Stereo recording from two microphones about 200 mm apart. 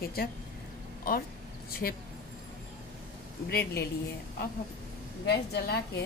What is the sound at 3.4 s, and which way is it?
Speech, 50° left (ahead or behind).